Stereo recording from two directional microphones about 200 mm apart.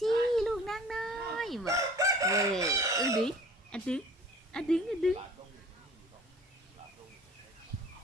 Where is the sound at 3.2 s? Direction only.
5° left (ahead or behind).